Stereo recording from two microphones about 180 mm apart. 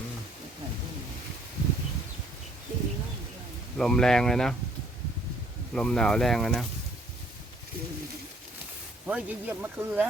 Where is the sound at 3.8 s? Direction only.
5° left (ahead or behind).